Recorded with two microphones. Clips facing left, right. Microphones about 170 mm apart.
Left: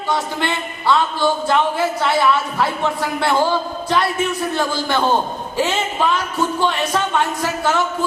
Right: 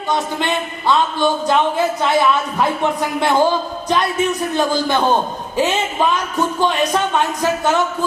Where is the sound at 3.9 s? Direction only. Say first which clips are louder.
Right 2 dB; 20° right (ahead or behind).